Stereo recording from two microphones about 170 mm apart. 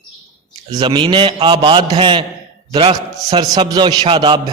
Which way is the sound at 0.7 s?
25° right (ahead or behind).